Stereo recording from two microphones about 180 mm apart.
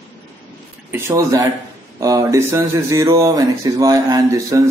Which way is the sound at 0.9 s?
15° right (ahead or behind).